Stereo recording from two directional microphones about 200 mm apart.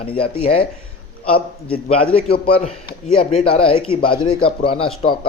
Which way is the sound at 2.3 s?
35° left (ahead or behind).